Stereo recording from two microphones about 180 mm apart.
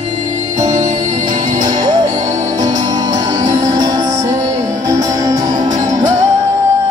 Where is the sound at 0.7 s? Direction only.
45° right (ahead or behind).